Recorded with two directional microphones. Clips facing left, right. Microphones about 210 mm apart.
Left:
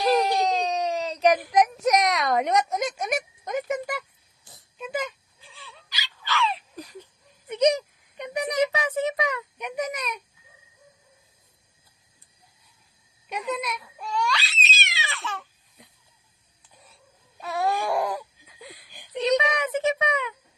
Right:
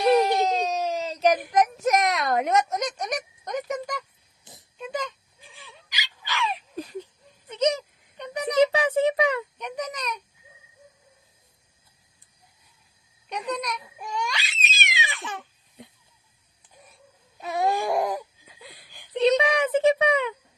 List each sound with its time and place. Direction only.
0.4 s a sound: 5° right (ahead or behind)
1.5 s a woman's voice: centre (ahead or behind)
4.5 s oink: 20° right (ahead or behind)
4.8 s a woman's voice: 5° left (ahead or behind)
5.4 s a sound: 15° right (ahead or behind)
7.0 s a sound: 15° left (ahead or behind)
8.5 s a child's voice: 30° right (ahead or behind)
9.6 s speech: 10° left (ahead or behind)
13.2 s a woman's voice: centre (ahead or behind)
14.0 s babbling: 15° right (ahead or behind)
17.4 s baby cry: 20° right (ahead or behind)
19.4 s speech: 30° right (ahead or behind)